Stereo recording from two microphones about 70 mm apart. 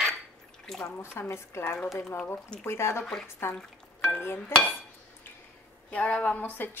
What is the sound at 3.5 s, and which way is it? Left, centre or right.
Frying, centre.